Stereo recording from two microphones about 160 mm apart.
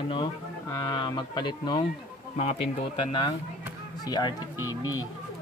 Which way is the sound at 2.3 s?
40° left (ahead or behind).